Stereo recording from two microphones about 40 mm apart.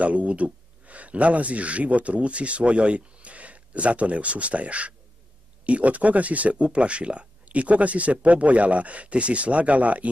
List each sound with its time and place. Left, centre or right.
0.0 s speech: right